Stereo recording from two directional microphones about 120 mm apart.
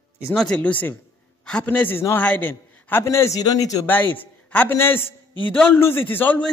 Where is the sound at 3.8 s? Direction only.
15° left (ahead or behind).